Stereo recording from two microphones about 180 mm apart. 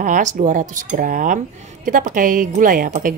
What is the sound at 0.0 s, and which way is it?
A woman's voice, 45° right (ahead or behind).